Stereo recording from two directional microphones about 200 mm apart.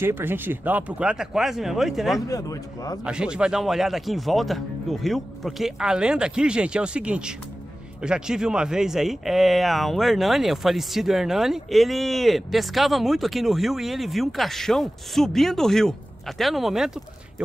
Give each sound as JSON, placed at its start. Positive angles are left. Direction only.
{"t": 0.0, "sound": "speech", "side_deg": -10}
{"t": 2.2, "sound": "a man's voice", "side_deg": 15}
{"t": 3.0, "sound": "speech", "side_deg": -5}